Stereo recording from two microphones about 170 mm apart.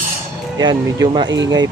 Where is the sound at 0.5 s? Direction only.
25° right (ahead or behind).